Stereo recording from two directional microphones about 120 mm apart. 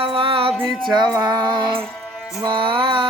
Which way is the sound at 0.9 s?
35° right (ahead or behind).